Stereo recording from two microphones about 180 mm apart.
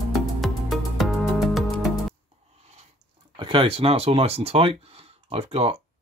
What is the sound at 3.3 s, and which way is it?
Speech, 30° right (ahead or behind).